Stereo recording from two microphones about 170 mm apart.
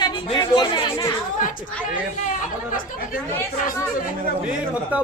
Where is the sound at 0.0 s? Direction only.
30° left (ahead or behind).